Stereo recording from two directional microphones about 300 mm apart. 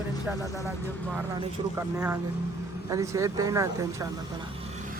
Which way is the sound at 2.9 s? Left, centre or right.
Centre.